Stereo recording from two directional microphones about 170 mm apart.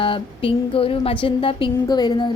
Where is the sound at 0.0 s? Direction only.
30° left (ahead or behind).